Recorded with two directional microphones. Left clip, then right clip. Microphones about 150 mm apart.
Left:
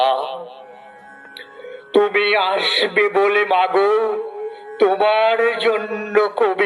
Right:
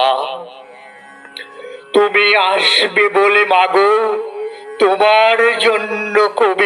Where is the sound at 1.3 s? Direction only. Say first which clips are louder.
Right 5 dB; 10° right (ahead or behind).